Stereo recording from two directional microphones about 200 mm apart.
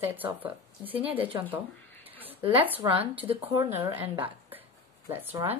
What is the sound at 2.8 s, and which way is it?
Speech, 20° right (ahead or behind).